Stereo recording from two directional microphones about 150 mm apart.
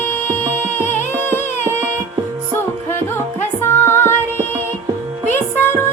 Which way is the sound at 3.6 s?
15° left (ahead or behind).